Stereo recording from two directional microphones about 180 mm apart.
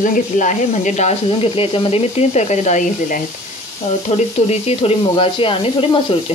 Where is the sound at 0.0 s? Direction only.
45° left (ahead or behind).